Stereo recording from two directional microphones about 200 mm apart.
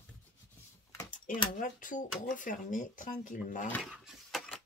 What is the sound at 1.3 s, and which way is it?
Speech, 40° left (ahead or behind).